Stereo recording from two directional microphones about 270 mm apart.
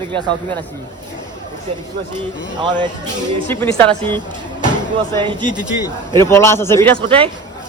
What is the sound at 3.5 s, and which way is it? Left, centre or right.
Speech, centre.